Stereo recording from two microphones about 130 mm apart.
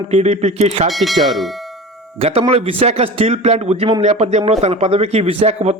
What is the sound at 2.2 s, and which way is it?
A man's voice, 50° right (ahead or behind).